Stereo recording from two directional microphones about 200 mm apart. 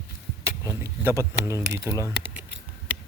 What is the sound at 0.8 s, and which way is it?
Speech, 15° right (ahead or behind).